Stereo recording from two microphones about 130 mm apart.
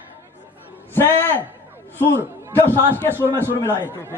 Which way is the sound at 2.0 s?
15° left (ahead or behind).